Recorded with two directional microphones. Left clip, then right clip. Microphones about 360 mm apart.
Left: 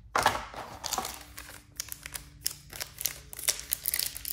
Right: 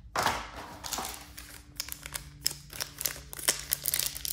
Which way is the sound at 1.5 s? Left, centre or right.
Centre.